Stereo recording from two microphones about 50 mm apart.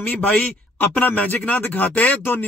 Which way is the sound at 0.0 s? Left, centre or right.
Left.